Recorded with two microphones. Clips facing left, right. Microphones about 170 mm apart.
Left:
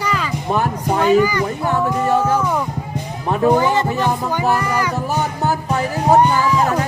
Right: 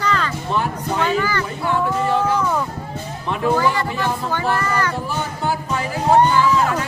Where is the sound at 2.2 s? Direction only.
10° left (ahead or behind).